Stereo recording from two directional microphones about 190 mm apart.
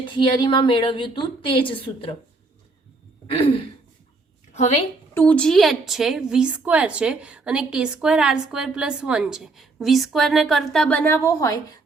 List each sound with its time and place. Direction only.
0.0 s a woman's voice: 25° left (ahead or behind)
5.1 s a woman's voice: 10° left (ahead or behind)